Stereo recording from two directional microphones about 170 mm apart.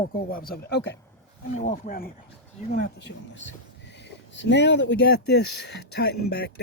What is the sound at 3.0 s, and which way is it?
Speech, 90° left.